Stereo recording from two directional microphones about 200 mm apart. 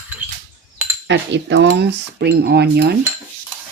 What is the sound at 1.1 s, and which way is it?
Speech, 60° right (ahead or behind).